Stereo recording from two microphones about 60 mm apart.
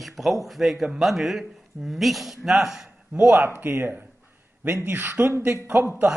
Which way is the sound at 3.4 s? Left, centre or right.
Right.